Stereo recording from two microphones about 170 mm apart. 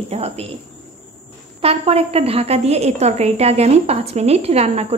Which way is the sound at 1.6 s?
35° right (ahead or behind).